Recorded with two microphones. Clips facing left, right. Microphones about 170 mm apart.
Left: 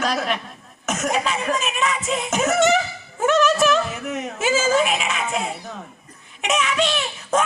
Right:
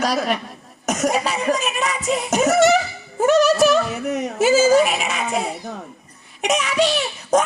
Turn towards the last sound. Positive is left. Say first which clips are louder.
# right 3 dB
turn(degrees=-40)  # may be behind; listen again after turning